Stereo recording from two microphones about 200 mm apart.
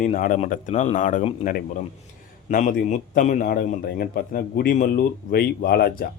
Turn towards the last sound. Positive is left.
turn(degrees=50)  # may be behind; listen again after turning